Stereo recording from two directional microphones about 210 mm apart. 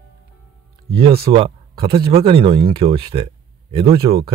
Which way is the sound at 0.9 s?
25° right (ahead or behind).